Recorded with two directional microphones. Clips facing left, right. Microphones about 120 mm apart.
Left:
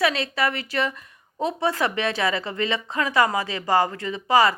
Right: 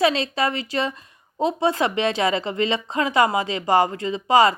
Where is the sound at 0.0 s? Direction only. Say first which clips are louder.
Right 2 dB; 25° right (ahead or behind).